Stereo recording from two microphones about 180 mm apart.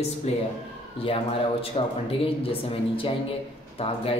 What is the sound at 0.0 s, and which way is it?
Speech, 35° left (ahead or behind).